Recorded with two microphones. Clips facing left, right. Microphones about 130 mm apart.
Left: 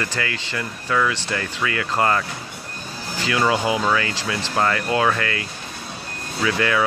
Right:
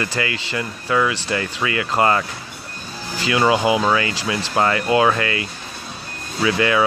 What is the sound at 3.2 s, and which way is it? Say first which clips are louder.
Speech: right 3 dB; 15° right (ahead or behind).